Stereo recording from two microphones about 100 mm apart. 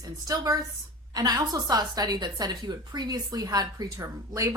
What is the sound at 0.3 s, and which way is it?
A woman's voice, 35° right (ahead or behind).